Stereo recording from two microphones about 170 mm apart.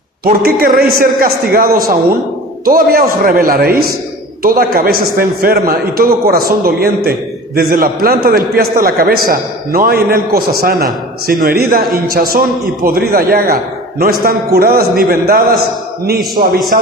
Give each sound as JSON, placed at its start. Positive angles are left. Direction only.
{"t": 0.3, "sound": "a man's voice", "side_deg": -60}
{"t": 16.4, "sound": "a man's voice", "side_deg": -45}